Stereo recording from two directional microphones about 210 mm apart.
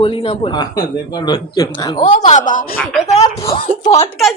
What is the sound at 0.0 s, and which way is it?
A woman's voice, 25° left (ahead or behind).